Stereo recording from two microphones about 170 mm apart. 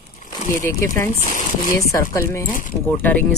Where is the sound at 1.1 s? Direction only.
55° left (ahead or behind).